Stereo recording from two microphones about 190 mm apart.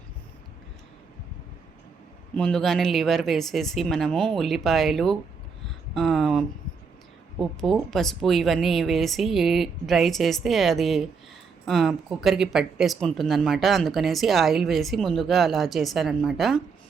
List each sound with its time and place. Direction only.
2.3 s speech: 5° left (ahead or behind)